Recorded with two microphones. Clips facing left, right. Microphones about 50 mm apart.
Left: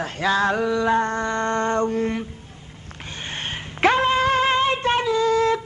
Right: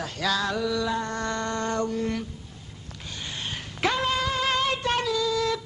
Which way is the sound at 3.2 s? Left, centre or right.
Left.